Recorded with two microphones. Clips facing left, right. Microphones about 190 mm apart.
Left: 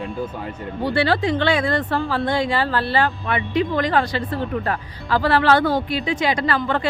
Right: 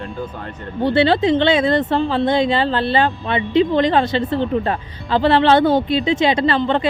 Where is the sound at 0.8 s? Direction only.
25° right (ahead or behind).